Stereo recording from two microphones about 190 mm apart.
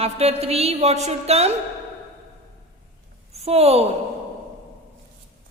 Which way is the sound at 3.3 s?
30° right (ahead or behind).